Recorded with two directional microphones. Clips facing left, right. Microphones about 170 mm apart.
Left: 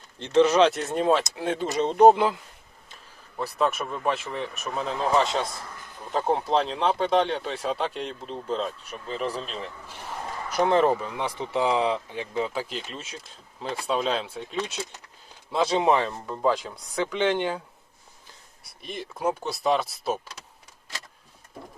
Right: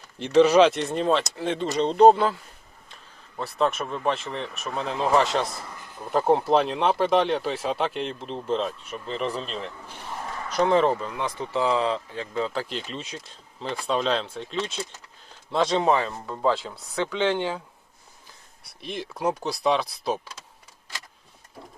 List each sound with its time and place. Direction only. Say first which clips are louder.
0.4 s speech: right 3 dB; 10° right (ahead or behind)
0.7 s speech: even; centre (ahead or behind)
2.9 s a sound: even; centre (ahead or behind)
3.6 s speech: right 1 dB; centre (ahead or behind)
10.2 s a sound: right 1 dB; 15° left (ahead or behind)
10.8 s speech: even; 10° left (ahead or behind)
12.6 s speech: right 2 dB; 5° left (ahead or behind)
18.8 s speech: right 1 dB; centre (ahead or behind)